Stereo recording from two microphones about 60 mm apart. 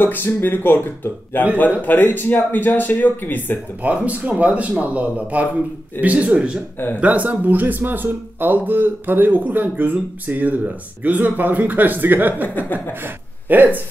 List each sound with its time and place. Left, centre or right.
0.0 s speech: left
3.8 s speech: right